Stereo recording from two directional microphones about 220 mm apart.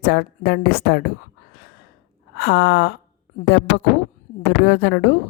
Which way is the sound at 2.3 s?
50° left (ahead or behind).